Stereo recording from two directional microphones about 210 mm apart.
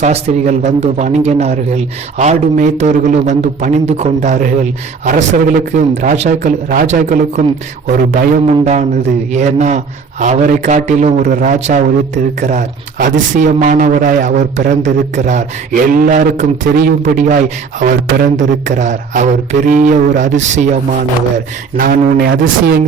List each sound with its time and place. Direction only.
0.0 s a man's voice: 35° right (ahead or behind)